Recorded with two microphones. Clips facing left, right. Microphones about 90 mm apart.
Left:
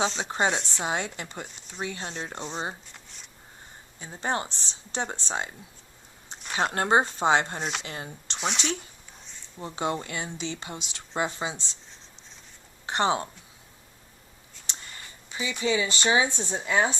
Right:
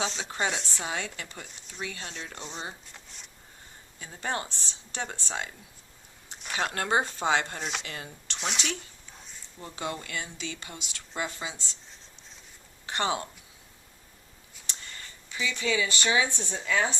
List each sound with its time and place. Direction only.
0.2 s speech: 35° left (ahead or behind)
1.8 s speech: 35° left (ahead or behind)
2.9 s a sound: centre (ahead or behind)
4.0 s speech: 25° left (ahead or behind)
7.6 s speech: centre (ahead or behind)
7.9 s speech: 30° left (ahead or behind)
8.4 s speech: centre (ahead or behind)
9.6 s speech: 25° left (ahead or behind)
12.8 s a sound: 25° left (ahead or behind)
15.4 s speech: 20° left (ahead or behind)